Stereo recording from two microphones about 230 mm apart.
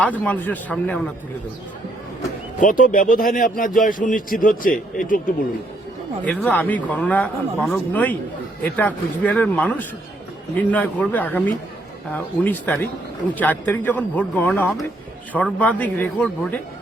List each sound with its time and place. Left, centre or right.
0.0 s speech: centre
2.6 s speech: left
6.2 s speech: centre